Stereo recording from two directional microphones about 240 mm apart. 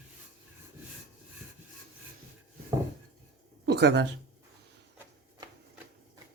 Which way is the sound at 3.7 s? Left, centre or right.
Right.